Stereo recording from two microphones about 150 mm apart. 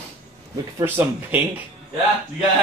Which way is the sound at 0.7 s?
15° right (ahead or behind).